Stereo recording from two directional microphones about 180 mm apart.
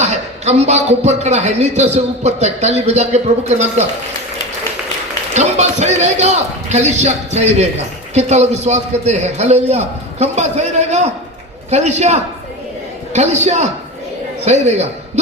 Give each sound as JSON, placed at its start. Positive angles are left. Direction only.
{"t": 0.0, "sound": "a man's voice", "side_deg": -40}
{"t": 5.3, "sound": "a man's voice", "side_deg": -40}